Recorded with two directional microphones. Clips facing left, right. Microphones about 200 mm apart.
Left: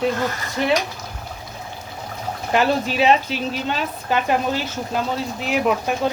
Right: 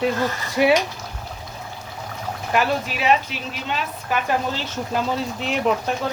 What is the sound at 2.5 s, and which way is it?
Speech, 25° left (ahead or behind).